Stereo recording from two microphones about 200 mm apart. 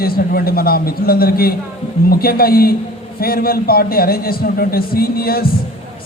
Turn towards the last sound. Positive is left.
turn(degrees=50)  # may be behind; listen again after turning